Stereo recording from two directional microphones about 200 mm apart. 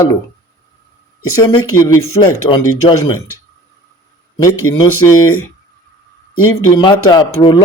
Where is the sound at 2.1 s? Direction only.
20° left (ahead or behind).